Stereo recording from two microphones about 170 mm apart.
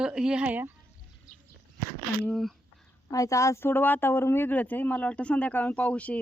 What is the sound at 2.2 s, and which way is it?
Speech, centre (ahead or behind).